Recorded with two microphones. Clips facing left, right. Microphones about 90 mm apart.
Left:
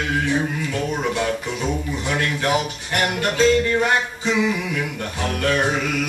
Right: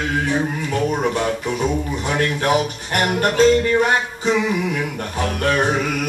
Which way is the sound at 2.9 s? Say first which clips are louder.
Right 3 dB; 45° right (ahead or behind).